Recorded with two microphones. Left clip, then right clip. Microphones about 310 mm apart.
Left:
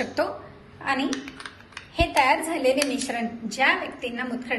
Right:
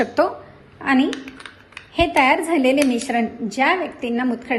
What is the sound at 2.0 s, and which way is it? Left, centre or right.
A woman's voice, right.